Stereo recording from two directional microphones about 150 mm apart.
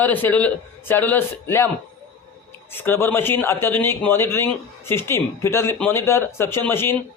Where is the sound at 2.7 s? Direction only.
15° left (ahead or behind).